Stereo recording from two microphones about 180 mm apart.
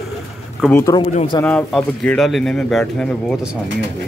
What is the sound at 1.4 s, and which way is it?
Speech, 5° left (ahead or behind).